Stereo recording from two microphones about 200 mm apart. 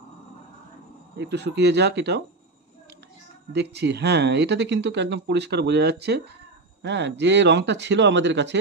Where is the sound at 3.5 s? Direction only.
55° right (ahead or behind).